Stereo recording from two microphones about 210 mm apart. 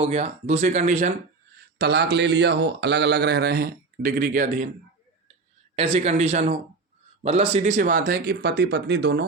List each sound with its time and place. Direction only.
0.0 s speech: 30° right (ahead or behind)
1.8 s speech: 50° right (ahead or behind)
5.7 s speech: 35° right (ahead or behind); by 9.2 s 50° right (ahead or behind)